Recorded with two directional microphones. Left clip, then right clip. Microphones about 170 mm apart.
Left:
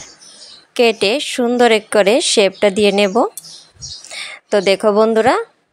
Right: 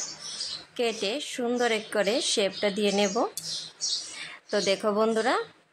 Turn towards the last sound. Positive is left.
turn(degrees=45)  # may be behind; listen again after turning